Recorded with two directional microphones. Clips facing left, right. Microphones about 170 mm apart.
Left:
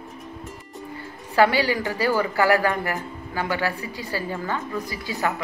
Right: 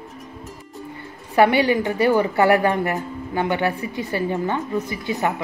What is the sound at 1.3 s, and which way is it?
A woman's voice, 20° right (ahead or behind).